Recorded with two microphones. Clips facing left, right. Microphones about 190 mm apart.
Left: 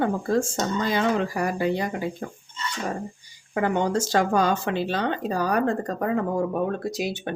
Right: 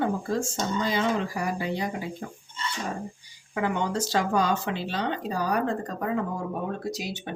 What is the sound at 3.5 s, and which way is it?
Speech, 45° left (ahead or behind).